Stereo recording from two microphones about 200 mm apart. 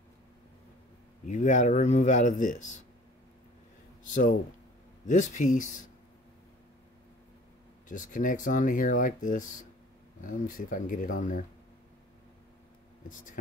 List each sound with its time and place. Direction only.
1.2 s speech: 35° left (ahead or behind)
4.1 s speech: 40° left (ahead or behind)
7.9 s speech: 40° left (ahead or behind)